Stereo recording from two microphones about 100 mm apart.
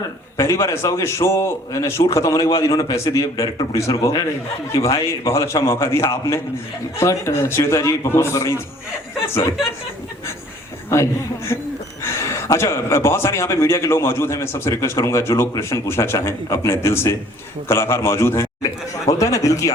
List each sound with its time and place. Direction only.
0.3 s a man's voice: 30° left (ahead or behind)
10.8 s a man's voice: 30° left (ahead or behind)